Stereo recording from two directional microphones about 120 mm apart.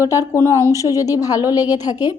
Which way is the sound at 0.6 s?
30° left (ahead or behind).